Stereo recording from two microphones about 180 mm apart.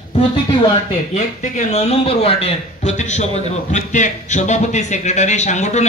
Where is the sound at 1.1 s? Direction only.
40° left (ahead or behind).